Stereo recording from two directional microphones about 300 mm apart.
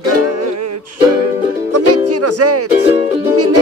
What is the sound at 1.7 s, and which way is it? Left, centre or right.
Music, right.